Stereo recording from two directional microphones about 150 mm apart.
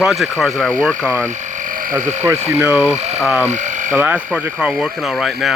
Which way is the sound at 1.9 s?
15° right (ahead or behind).